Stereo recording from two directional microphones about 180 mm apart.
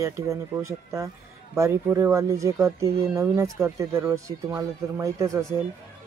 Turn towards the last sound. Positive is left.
turn(degrees=-15)  # may be behind; listen again after turning